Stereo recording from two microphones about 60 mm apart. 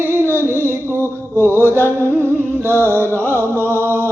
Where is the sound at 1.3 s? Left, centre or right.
Right.